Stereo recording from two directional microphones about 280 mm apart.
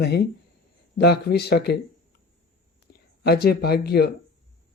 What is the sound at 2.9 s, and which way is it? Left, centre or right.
Speech, left.